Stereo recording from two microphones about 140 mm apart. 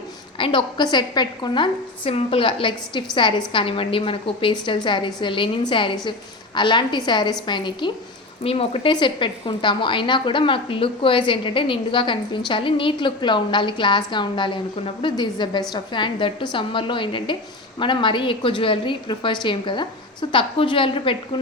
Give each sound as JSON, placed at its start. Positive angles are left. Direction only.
{"t": 0.3, "sound": "a woman's voice", "side_deg": 35}